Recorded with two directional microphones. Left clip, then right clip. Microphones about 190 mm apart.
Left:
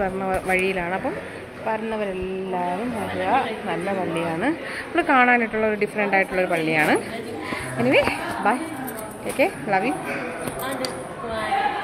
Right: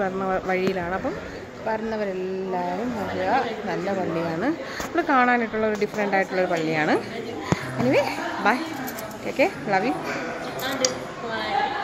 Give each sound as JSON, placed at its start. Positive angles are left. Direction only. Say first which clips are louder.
{"t": 0.0, "sound": "speech", "louder": "left 1 dB", "side_deg": 0}
{"t": 3.3, "sound": "speech", "louder": "left 2 dB", "side_deg": 0}